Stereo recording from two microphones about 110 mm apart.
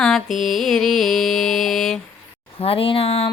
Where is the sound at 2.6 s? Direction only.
60° left (ahead or behind).